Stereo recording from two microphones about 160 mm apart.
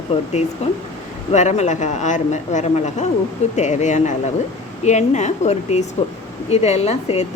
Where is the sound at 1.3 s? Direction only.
45° left (ahead or behind).